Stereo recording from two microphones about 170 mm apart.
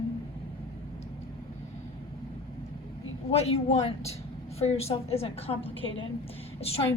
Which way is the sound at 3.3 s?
35° left (ahead or behind).